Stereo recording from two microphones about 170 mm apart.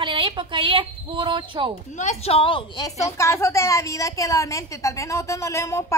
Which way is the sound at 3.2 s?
15° left (ahead or behind).